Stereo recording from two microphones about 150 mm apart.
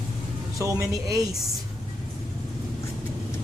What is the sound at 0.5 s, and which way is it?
Speech, 20° right (ahead or behind).